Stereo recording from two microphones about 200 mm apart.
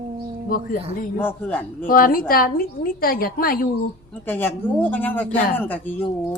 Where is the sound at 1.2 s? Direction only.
10° left (ahead or behind).